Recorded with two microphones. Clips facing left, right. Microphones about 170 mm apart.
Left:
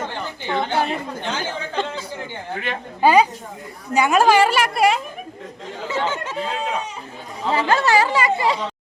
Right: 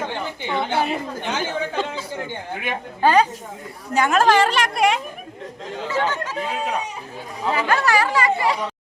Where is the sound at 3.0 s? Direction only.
10° left (ahead or behind).